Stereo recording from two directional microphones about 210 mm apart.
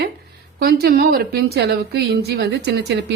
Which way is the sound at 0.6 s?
45° right (ahead or behind).